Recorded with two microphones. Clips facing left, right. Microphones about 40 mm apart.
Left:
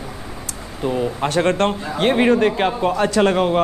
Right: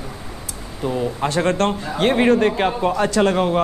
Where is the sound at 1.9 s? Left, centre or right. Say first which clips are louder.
Even; left.